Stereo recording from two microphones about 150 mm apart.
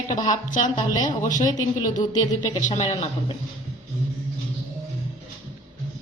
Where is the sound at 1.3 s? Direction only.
55° left (ahead or behind).